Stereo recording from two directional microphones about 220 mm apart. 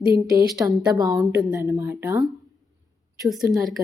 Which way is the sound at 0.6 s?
10° right (ahead or behind).